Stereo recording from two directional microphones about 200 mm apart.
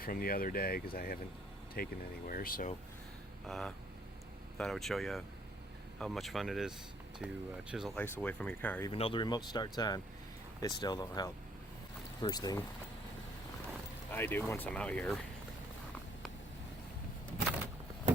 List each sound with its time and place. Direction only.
0.0 s speech: 45° left (ahead or behind)
3.4 s speech: centre (ahead or behind)
8.9 s speech: 25° left (ahead or behind)
14.1 s speech: 10° left (ahead or behind)